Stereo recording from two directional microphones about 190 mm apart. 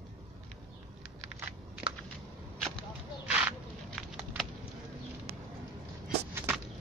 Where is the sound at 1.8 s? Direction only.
25° right (ahead or behind).